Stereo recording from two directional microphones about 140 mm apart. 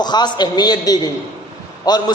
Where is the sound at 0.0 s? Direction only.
30° left (ahead or behind).